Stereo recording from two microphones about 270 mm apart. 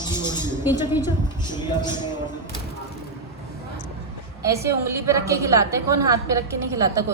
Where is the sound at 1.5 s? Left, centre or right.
Centre.